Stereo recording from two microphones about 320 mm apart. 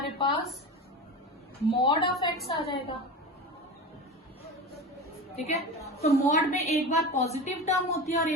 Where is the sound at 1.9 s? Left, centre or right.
Centre.